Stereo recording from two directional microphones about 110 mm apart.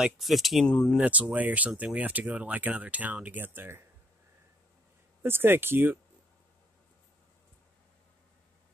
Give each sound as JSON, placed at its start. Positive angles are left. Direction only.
{"t": 0.0, "sound": "speech", "side_deg": 0}
{"t": 0.9, "sound": "speech", "side_deg": -10}
{"t": 5.2, "sound": "speech", "side_deg": -20}